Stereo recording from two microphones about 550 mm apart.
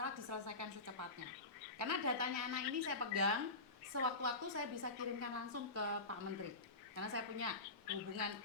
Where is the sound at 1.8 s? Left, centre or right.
Right.